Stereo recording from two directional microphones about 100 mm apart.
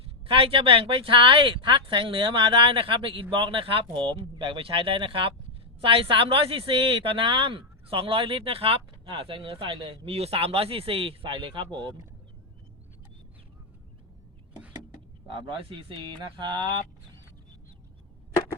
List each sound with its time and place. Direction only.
0.3 s speech: 65° right (ahead or behind)
10.1 s a man's voice: 90° right; by 12.0 s 50° right (ahead or behind)
15.3 s speech: 55° right (ahead or behind)